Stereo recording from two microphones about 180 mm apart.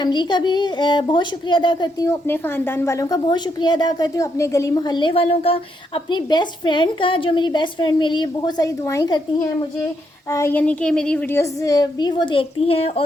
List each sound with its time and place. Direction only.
0.0 s a child's voice: 25° left (ahead or behind)